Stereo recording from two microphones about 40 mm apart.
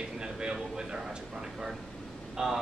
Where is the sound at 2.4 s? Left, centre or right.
Centre.